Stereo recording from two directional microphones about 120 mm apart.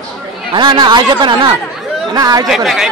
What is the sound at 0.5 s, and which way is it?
Speech, 40° right (ahead or behind).